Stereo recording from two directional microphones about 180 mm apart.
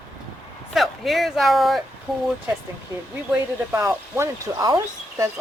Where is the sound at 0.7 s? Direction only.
Centre (ahead or behind).